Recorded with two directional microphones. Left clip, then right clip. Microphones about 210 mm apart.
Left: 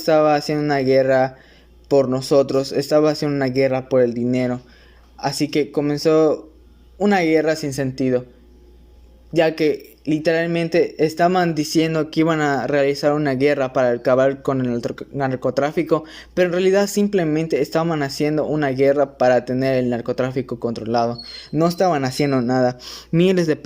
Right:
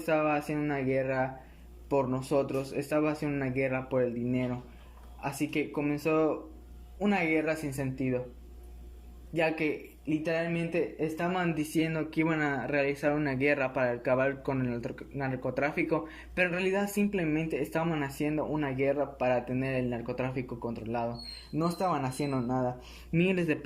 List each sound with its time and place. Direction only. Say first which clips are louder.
0.0 s speech: left 13 dB; 35° left (ahead or behind)
9.3 s speech: left 12 dB; 35° left (ahead or behind)